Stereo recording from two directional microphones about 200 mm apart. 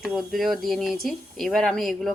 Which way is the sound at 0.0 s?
Centre (ahead or behind).